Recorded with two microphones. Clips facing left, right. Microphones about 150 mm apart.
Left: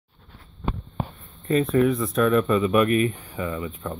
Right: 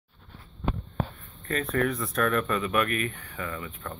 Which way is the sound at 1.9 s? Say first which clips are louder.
Left 6 dB; centre (ahead or behind).